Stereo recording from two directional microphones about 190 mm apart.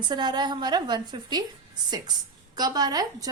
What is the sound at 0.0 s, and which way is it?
A woman's voice, 20° right (ahead or behind).